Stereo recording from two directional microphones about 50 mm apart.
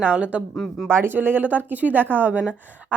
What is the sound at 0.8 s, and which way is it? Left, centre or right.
Speech, right.